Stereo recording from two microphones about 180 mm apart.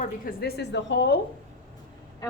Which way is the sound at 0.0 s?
55° left (ahead or behind).